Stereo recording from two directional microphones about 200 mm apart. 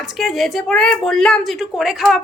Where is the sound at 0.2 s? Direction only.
Centre (ahead or behind).